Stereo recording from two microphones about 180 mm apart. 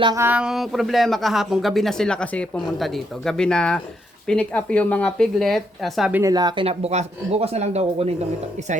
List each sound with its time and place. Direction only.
0.0 s speech: 20° right (ahead or behind)
0.3 s speech: 5° right (ahead or behind)
6.3 s speech: 25° right (ahead or behind)